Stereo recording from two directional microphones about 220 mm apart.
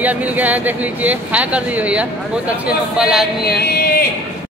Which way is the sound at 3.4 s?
45° left (ahead or behind).